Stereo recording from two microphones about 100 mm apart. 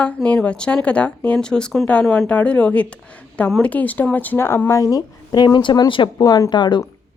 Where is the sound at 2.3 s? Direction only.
15° left (ahead or behind).